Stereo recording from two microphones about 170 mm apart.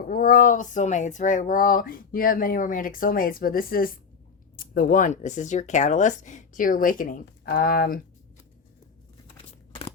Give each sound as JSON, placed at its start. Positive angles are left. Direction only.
{"t": 0.1, "sound": "speech", "side_deg": 55}